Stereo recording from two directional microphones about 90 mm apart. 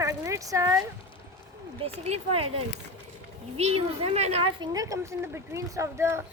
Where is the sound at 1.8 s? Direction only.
90° right.